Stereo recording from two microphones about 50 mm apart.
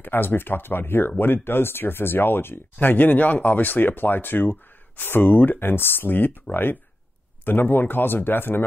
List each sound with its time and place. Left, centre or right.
0.0 s speech: left